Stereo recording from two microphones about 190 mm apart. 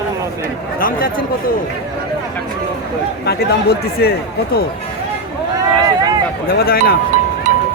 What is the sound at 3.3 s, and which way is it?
Speech, 55° left (ahead or behind).